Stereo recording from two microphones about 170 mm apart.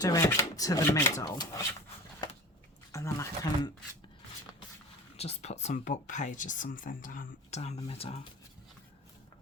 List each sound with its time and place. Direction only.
0.0 s speech: 20° left (ahead or behind)
2.9 s speech: 15° left (ahead or behind)
5.1 s speech: 35° left (ahead or behind)